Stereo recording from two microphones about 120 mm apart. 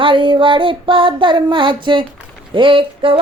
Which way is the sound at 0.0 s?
45° right (ahead or behind).